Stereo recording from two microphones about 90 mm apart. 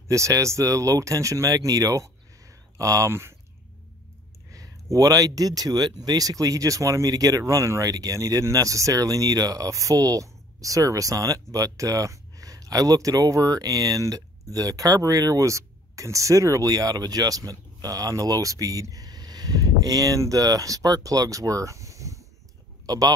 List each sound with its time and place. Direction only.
0.1 s speech: 35° right (ahead or behind)
4.5 s speech: 40° right (ahead or behind)